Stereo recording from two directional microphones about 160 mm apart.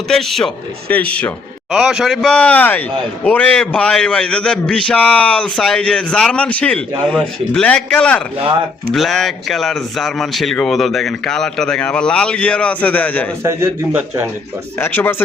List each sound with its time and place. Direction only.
0.1 s speech: centre (ahead or behind)
1.7 s a man's voice: 5° right (ahead or behind)
13.4 s a man's voice: 15° right (ahead or behind)
14.8 s a man's voice: 15° left (ahead or behind)